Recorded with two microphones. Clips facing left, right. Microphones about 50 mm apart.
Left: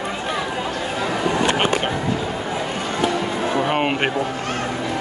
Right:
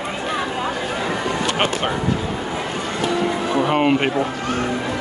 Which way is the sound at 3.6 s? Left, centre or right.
Centre.